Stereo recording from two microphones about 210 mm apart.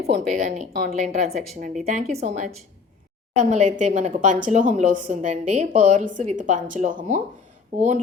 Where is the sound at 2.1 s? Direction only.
35° right (ahead or behind).